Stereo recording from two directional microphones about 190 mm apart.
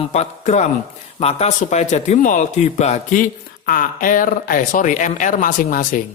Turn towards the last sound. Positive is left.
turn(degrees=45)  # may be behind; listen again after turning